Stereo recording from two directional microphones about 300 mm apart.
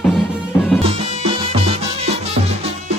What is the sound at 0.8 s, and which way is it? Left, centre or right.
Music, centre.